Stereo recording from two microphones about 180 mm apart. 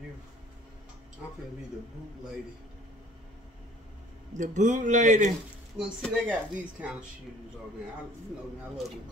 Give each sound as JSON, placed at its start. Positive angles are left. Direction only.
{"t": 4.3, "sound": "a man's voice", "side_deg": -45}
{"t": 5.8, "sound": "speech", "side_deg": -5}